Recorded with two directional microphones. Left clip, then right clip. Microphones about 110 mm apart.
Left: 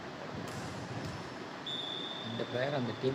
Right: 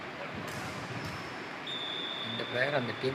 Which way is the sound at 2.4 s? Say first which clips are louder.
Right 4 dB; 30° right (ahead or behind).